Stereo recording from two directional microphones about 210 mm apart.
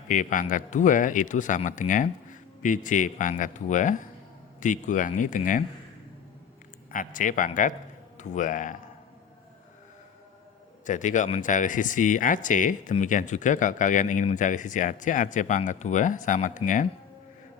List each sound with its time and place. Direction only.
0.1 s speech: 40° left (ahead or behind)
6.9 s speech: 40° left (ahead or behind)
10.8 s speech: 35° left (ahead or behind)